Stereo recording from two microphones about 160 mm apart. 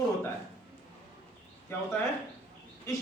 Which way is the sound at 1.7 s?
15° left (ahead or behind).